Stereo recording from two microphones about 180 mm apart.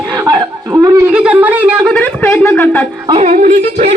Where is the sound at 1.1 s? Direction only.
5° right (ahead or behind).